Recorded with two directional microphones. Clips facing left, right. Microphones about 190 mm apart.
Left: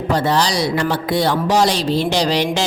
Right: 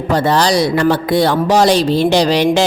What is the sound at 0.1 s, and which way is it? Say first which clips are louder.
A man's voice: right 4 dB; 55° right (ahead or behind).